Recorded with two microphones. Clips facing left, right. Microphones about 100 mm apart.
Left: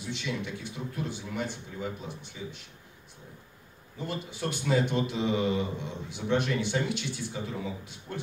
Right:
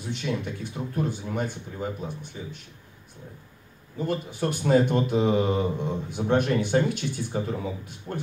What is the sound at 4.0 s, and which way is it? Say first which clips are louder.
Speech: right 6 dB; 45° right (ahead or behind).